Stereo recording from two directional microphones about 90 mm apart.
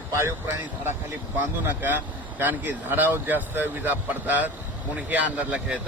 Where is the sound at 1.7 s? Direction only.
20° right (ahead or behind).